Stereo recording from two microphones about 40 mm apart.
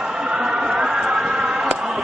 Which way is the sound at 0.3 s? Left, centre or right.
Right.